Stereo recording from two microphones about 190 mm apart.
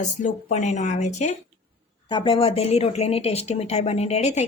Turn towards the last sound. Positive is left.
turn(degrees=35)  # may be behind; listen again after turning